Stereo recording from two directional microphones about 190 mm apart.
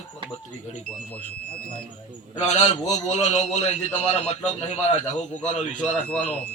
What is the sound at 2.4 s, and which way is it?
A man's voice, 40° left (ahead or behind).